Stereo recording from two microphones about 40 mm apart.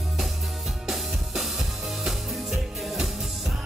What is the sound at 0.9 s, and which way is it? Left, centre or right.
Music, centre.